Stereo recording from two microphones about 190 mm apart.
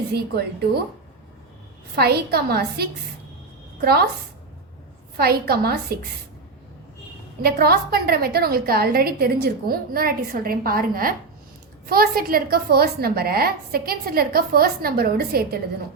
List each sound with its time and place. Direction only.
0.1 s a woman's voice: 60° right (ahead or behind)
2.0 s a woman's voice: 55° right (ahead or behind)
5.1 s a woman's voice: 55° right (ahead or behind)
7.4 s a woman's voice: 55° right (ahead or behind)